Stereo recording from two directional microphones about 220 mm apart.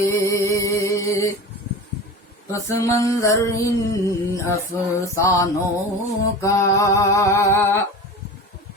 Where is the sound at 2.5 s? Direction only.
15° left (ahead or behind).